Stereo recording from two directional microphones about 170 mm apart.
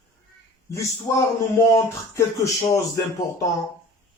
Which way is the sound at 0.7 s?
20° left (ahead or behind).